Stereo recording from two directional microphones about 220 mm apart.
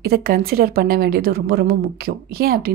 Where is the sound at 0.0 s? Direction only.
45° right (ahead or behind).